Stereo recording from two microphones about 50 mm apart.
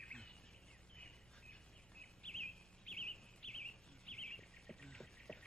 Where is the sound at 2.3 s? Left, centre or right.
Centre.